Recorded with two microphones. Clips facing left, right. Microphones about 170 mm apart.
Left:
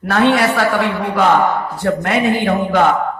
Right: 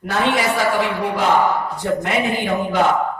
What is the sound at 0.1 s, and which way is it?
A man's voice, 65° left (ahead or behind).